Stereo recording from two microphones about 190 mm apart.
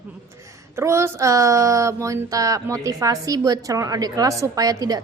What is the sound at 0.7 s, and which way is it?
Speech, 15° right (ahead or behind).